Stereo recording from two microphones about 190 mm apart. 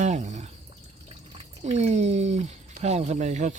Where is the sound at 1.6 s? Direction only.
35° right (ahead or behind).